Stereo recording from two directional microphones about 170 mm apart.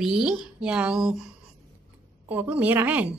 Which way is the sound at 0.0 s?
5° right (ahead or behind).